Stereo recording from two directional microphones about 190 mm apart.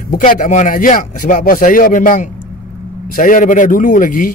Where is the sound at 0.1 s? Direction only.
45° left (ahead or behind).